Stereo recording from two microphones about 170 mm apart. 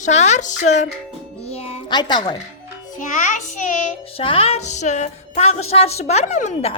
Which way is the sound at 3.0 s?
50° left (ahead or behind).